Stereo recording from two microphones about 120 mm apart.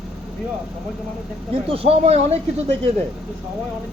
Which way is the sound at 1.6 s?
55° right (ahead or behind).